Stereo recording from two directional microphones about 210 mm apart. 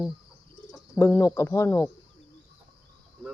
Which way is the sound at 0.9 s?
15° left (ahead or behind).